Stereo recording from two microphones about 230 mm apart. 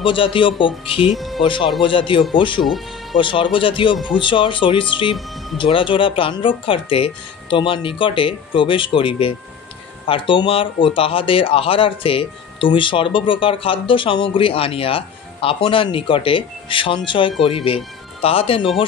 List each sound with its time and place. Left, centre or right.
0.0 s speech: left
1.1 s speech: centre
1.4 s speech: left
2.6 s speech: centre
3.2 s speech: left